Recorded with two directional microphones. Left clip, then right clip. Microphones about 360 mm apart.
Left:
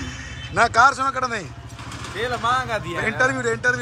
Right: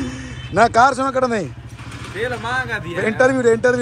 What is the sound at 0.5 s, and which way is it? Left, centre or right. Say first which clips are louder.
A man's voice: right 3 dB; centre.